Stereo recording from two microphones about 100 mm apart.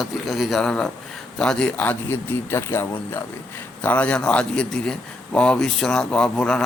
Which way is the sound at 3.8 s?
15° left (ahead or behind).